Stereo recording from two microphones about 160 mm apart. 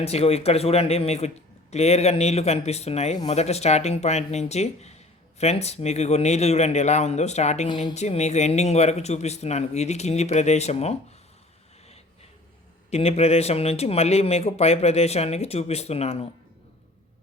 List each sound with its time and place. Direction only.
0.0 s a man's voice: 40° left (ahead or behind)
12.9 s a man's voice: 40° left (ahead or behind)